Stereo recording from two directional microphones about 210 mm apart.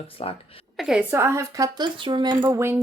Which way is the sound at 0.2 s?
30° left (ahead or behind).